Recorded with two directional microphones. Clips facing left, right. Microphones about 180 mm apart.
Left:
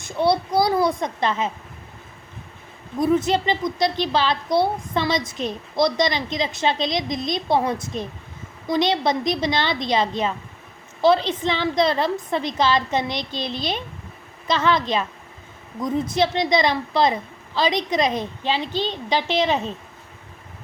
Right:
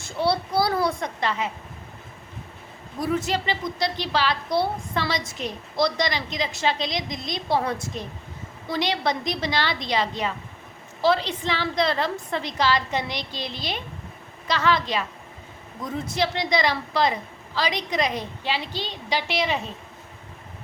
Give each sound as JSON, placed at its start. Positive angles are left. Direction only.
{"t": 0.0, "sound": "a woman's voice", "side_deg": 20}
{"t": 3.0, "sound": "a woman's voice", "side_deg": 20}